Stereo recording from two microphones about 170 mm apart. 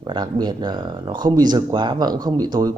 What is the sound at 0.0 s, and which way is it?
A man's voice, 25° right (ahead or behind).